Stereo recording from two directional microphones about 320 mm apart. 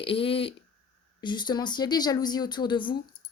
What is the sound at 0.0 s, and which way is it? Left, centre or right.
A woman's voice, centre.